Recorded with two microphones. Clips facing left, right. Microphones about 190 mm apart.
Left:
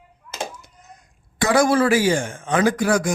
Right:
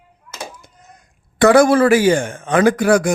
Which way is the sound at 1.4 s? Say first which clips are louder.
Right 6 dB; 60° right (ahead or behind).